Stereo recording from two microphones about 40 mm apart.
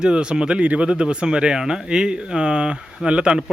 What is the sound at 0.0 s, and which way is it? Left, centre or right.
Speech, right.